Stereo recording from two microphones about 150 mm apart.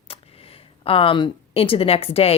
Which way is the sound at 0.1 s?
40° left (ahead or behind).